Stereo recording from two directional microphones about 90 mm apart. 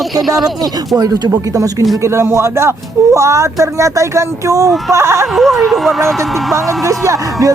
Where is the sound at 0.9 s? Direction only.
45° right (ahead or behind).